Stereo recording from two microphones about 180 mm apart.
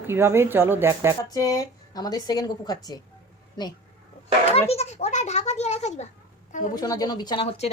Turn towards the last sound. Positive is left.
turn(degrees=35)  # may be behind; listen again after turning